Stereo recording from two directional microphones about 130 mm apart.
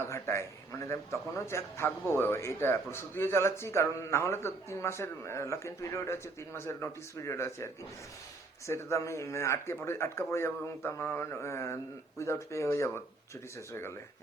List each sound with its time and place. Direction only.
0.0 s a man's voice: 20° left (ahead or behind)